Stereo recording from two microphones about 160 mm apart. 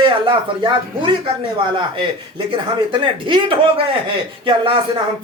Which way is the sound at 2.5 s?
30° right (ahead or behind).